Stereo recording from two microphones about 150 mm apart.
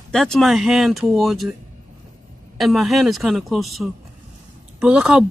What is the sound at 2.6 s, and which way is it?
Speech, centre (ahead or behind).